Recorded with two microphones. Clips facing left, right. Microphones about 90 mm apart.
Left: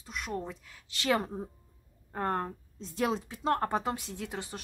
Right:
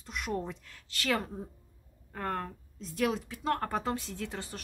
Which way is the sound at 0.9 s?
20° left (ahead or behind).